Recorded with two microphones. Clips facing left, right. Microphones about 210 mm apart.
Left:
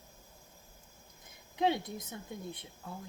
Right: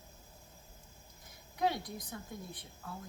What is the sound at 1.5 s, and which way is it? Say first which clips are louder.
Speech: left 3 dB; 25° left (ahead or behind).